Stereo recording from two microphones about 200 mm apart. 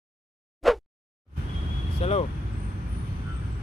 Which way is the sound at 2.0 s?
30° left (ahead or behind).